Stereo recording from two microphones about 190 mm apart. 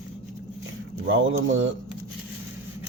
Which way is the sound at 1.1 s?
85° right.